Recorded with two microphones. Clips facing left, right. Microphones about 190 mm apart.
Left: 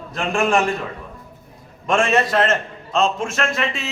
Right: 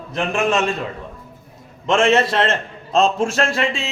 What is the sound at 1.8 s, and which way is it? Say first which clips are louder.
A man's voice: right 2 dB; 25° right (ahead or behind).